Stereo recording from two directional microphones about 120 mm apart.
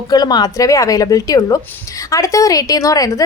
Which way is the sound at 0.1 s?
35° left (ahead or behind).